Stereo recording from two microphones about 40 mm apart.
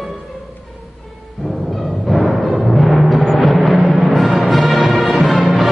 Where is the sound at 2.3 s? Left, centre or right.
Centre.